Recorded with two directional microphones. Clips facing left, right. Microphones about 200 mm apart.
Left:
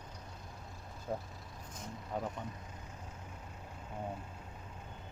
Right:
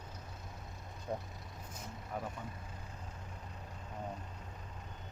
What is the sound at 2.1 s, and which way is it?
Speech, 25° left (ahead or behind).